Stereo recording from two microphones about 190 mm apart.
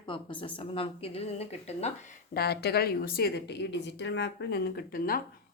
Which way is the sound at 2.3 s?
55° left (ahead or behind).